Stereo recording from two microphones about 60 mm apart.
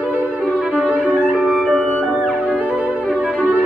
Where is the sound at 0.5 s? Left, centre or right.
Right.